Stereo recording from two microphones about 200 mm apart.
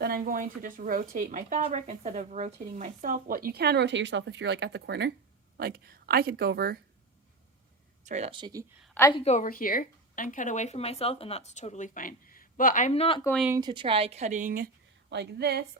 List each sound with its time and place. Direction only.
0.0 s speech: 45° right (ahead or behind)
8.0 s speech: 35° right (ahead or behind)
8.3 s speech: 20° right (ahead or behind)
9.0 s a woman's voice: 15° left (ahead or behind)
9.2 s speech: 40° left (ahead or behind)
13.6 s a woman's voice: 25° right (ahead or behind); by 14.7 s 45° right (ahead or behind)
15.1 s a woman's voice: 55° right (ahead or behind)